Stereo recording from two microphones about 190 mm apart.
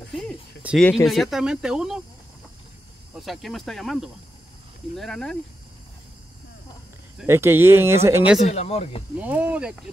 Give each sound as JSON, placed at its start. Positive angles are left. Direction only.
{"t": 0.2, "sound": "a sound", "side_deg": 0}
{"t": 1.0, "sound": "speech", "side_deg": 0}
{"t": 3.2, "sound": "speech", "side_deg": 0}
{"t": 7.2, "sound": "speech", "side_deg": -15}
{"t": 8.5, "sound": "speech", "side_deg": 35}
{"t": 9.2, "sound": "speech", "side_deg": -10}